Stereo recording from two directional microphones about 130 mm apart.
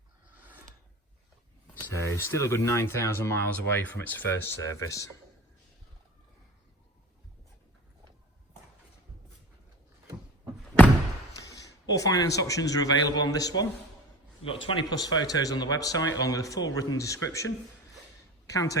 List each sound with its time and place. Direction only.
0.3 s a sound: 15° right (ahead or behind)
1.9 s speech: 20° left (ahead or behind)
11.5 s a man's voice: 25° left (ahead or behind)
14.4 s speech: 40° left (ahead or behind); by 17.5 s 25° left (ahead or behind)
18.5 s speech: 25° left (ahead or behind)